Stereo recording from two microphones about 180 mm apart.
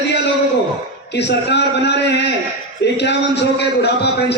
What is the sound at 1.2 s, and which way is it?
A man's voice, 70° left (ahead or behind).